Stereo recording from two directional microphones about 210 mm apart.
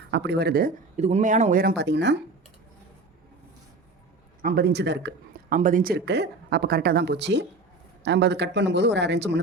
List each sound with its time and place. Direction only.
0.1 s speech: 55° right (ahead or behind)
0.9 s speech: 30° right (ahead or behind); by 2.1 s 55° right (ahead or behind)
4.4 s speech: 50° right (ahead or behind)
5.5 s speech: 40° right (ahead or behind); by 9.4 s 55° right (ahead or behind)